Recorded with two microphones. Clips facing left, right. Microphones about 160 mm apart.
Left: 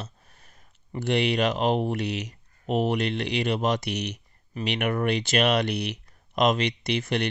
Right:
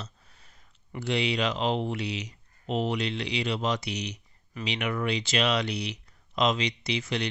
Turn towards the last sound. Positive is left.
turn(degrees=55)  # may be behind; listen again after turning